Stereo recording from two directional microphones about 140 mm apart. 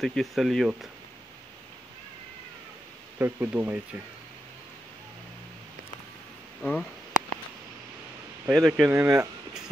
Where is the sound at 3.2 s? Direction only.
15° right (ahead or behind).